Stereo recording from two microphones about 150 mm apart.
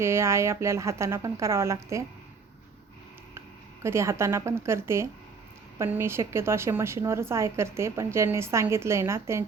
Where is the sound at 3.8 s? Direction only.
15° right (ahead or behind).